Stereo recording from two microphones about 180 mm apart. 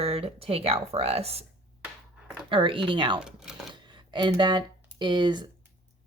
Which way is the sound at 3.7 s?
25° right (ahead or behind).